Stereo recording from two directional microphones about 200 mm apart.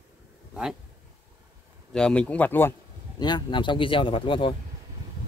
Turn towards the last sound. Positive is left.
turn(degrees=25)  # may be behind; listen again after turning